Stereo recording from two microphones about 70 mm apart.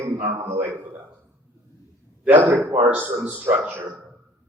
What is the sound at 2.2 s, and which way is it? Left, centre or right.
A man's voice, right.